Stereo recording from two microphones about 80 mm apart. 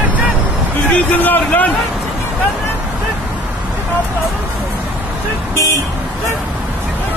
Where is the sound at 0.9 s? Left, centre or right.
Centre.